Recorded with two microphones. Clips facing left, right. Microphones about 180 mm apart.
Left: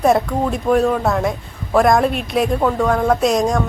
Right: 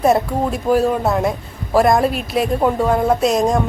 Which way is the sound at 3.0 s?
Centre (ahead or behind).